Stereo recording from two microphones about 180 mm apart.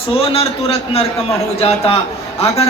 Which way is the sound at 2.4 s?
35° left (ahead or behind).